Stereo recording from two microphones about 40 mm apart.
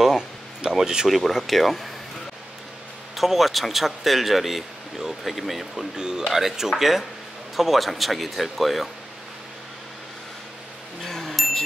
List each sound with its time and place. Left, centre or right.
0.7 s speech: centre
3.2 s speech: centre
5.9 s speech: centre
11.1 s a sound: centre